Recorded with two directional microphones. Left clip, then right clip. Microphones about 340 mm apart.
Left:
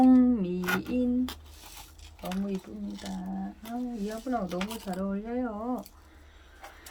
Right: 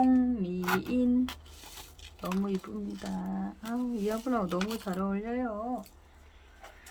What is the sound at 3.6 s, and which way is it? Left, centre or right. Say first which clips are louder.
Speech: right 4 dB; centre.